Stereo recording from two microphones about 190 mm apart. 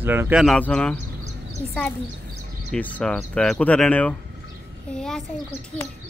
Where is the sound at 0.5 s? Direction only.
5° left (ahead or behind).